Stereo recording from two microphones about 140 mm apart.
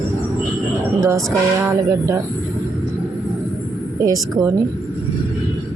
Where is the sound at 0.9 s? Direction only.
20° right (ahead or behind).